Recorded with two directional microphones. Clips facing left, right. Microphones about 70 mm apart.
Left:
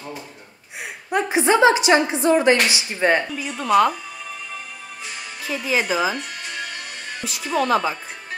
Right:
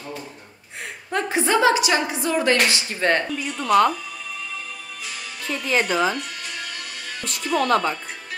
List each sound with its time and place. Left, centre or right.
1.1 s a woman's voice: centre
5.4 s speech: centre
6.1 s music: left
7.4 s speech: centre